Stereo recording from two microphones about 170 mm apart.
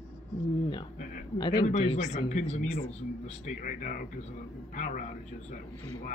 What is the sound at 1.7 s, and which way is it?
Speech, 45° left (ahead or behind).